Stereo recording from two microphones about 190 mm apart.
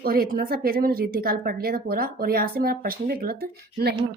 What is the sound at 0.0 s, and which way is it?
A woman's voice, 50° right (ahead or behind).